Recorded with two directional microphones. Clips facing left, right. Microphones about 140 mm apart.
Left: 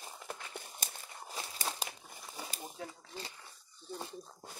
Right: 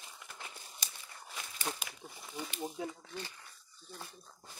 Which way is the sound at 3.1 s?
25° left (ahead or behind).